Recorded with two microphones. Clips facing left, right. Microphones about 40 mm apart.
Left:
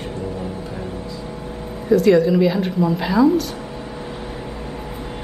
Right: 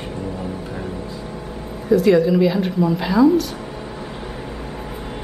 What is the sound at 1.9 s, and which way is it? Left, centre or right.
A woman's voice, centre.